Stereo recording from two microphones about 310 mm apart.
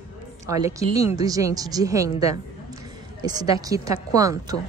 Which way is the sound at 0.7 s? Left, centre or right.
Centre.